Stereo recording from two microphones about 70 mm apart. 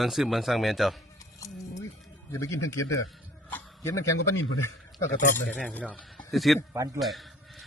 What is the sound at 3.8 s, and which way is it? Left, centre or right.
Speech, left.